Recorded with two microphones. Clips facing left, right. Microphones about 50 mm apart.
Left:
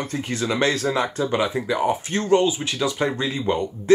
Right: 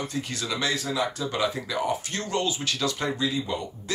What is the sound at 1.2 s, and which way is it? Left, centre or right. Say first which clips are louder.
Speech: left 5 dB; left.